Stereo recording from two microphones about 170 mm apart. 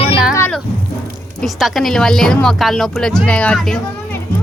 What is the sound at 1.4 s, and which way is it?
A woman's voice, centre (ahead or behind).